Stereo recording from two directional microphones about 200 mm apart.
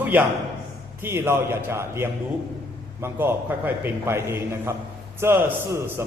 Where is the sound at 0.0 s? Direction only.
10° right (ahead or behind).